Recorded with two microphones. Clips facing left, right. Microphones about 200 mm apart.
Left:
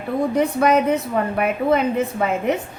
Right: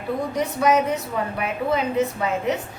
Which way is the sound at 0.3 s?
55° left (ahead or behind).